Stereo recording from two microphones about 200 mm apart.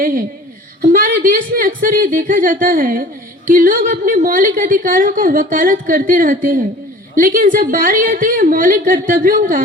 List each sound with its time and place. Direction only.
0.8 s speech: 45° right (ahead or behind)